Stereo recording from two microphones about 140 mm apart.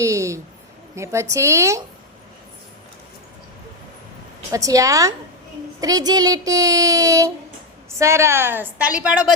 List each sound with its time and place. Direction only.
0.0 s a sound: 20° right (ahead or behind)
0.9 s speech: 20° right (ahead or behind)
4.5 s a woman's voice: 25° right (ahead or behind); by 9.3 s 5° right (ahead or behind)